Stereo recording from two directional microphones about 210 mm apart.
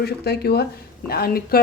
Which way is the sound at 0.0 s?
50° left (ahead or behind).